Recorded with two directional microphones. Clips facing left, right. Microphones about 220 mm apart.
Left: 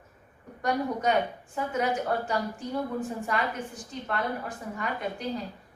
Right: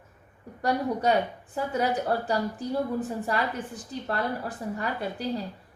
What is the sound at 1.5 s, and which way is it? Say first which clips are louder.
A woman's voice: right 1 dB; 35° right (ahead or behind).